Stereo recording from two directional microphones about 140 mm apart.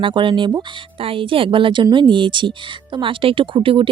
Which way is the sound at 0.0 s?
35° right (ahead or behind).